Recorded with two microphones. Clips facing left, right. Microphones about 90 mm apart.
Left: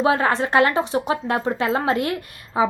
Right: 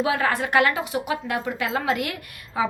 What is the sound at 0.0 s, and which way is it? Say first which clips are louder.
A woman's voice: left 4 dB; 30° left (ahead or behind).